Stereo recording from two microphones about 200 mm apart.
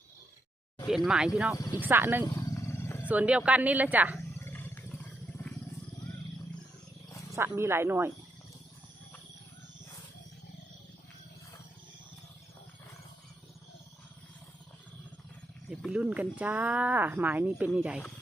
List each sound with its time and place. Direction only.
0.9 s speech: 5° right (ahead or behind)
1.5 s speech: 20° left (ahead or behind)
1.8 s speech: 10° right (ahead or behind)
2.2 s roaring cats: 20° left (ahead or behind)
3.1 s speech: 5° right (ahead or behind)
4.4 s roar: 10° left (ahead or behind)
7.3 s speech: 15° right (ahead or behind)
15.7 s speech: 5° right (ahead or behind)